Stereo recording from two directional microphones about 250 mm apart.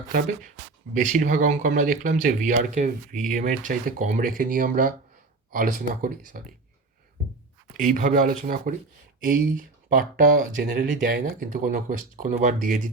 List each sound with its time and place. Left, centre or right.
0.1 s speech: right
7.8 s speech: right